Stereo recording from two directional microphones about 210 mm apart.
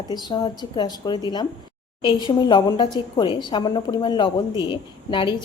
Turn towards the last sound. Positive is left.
turn(degrees=20)  # may be behind; listen again after turning